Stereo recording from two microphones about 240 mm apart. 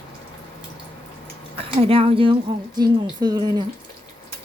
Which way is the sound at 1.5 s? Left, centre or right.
Right.